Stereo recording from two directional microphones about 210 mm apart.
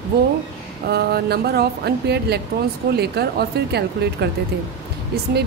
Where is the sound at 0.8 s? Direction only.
50° right (ahead or behind).